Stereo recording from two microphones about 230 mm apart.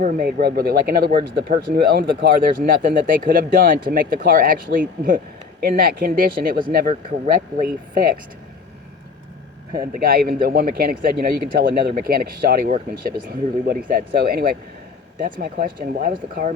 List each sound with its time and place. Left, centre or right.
0.0 s speech: right
9.7 s speech: right